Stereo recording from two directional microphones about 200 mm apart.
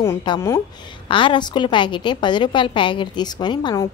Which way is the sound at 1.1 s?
25° left (ahead or behind).